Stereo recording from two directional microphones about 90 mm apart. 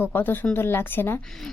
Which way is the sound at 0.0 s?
20° left (ahead or behind).